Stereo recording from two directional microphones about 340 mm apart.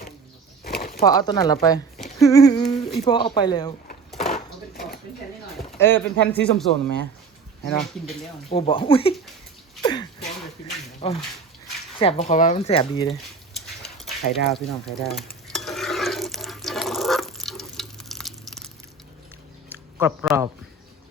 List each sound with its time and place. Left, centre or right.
0.6 s a sound: left
1.0 s speech: centre
4.2 s dishes: left
5.5 s speech: centre
8.4 s speech: centre
9.8 s a sound: centre
11.0 s speech: centre
13.5 s a sound: centre
19.7 s speech: centre